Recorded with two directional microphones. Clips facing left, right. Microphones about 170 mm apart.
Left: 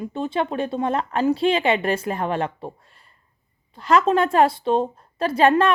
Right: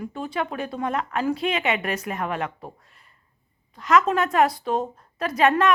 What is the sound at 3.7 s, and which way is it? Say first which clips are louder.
A woman's voice: left 2 dB; 30° left (ahead or behind).